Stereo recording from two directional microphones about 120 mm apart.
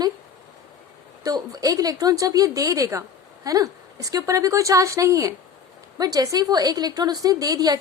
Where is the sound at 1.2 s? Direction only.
30° right (ahead or behind).